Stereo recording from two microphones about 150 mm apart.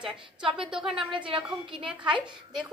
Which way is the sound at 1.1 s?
35° right (ahead or behind).